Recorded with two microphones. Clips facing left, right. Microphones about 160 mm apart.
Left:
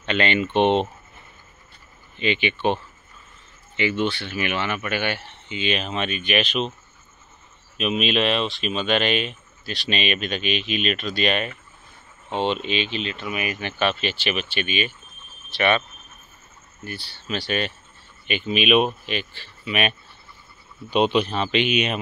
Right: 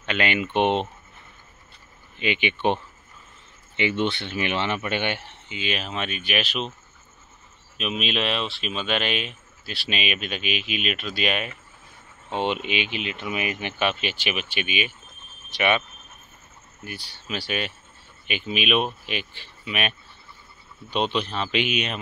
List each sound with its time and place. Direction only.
0.0 s speech: 5° right (ahead or behind)
2.1 s speech: 15° right (ahead or behind)
5.5 s speech: 5° right (ahead or behind)
7.7 s speech: centre (ahead or behind)
16.8 s speech: 15° right (ahead or behind)
19.0 s speech: 15° right (ahead or behind)
19.6 s speech: centre (ahead or behind)
21.5 s speech: 5° right (ahead or behind)